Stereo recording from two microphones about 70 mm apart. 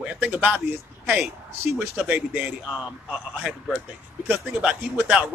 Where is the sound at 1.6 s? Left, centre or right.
Right.